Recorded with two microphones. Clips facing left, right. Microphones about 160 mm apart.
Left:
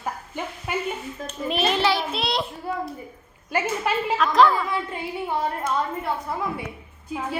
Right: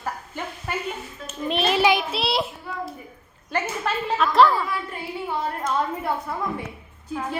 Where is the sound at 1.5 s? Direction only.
Centre (ahead or behind).